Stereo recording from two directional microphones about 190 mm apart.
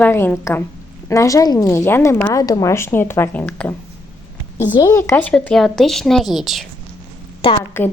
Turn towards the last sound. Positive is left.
turn(degrees=30)  # may be behind; listen again after turning